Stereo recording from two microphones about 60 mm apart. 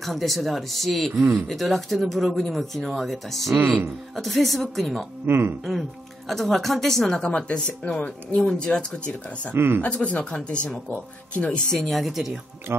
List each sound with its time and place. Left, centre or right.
0.0 s speech: centre
5.2 s speech: right
5.7 s speech: centre; by 8.4 s left
8.5 s speech: centre
9.5 s speech: right
9.8 s speech: left
11.7 s speech: centre